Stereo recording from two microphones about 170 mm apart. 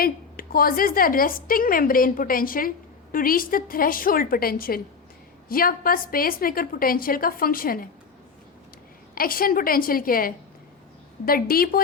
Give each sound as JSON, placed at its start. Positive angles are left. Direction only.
{"t": 0.0, "sound": "a woman's voice", "side_deg": 60}
{"t": 9.1, "sound": "a woman's voice", "side_deg": 60}